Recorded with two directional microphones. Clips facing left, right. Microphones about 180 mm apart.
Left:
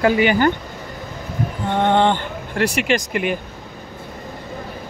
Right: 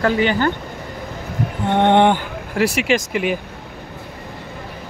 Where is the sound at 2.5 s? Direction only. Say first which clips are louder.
Right 2 dB; 5° right (ahead or behind).